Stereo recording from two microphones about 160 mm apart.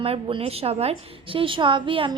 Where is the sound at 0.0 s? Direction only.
35° right (ahead or behind).